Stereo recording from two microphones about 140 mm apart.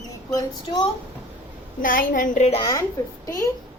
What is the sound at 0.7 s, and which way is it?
Speech, 35° left (ahead or behind).